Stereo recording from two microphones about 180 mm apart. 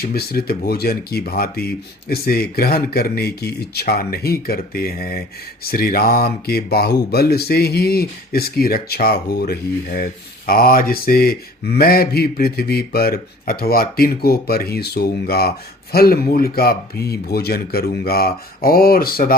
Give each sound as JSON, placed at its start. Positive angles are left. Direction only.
{"t": 0.0, "sound": "speech", "side_deg": 55}